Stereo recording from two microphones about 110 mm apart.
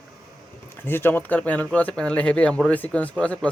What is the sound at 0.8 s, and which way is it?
Speech, 20° left (ahead or behind).